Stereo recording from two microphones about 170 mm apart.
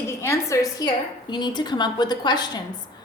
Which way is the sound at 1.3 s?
25° left (ahead or behind).